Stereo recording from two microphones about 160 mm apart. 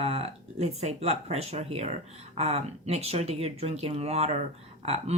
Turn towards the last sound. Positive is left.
turn(degrees=-40)  # may be behind; listen again after turning